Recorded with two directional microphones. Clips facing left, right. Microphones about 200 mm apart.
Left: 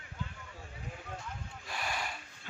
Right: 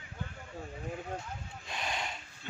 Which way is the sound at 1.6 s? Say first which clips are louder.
Right 1 dB; 20° right (ahead or behind).